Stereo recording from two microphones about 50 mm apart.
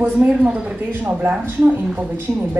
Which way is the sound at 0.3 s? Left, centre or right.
Right.